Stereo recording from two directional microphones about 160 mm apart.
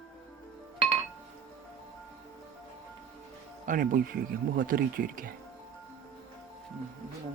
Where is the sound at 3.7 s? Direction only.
60° right (ahead or behind).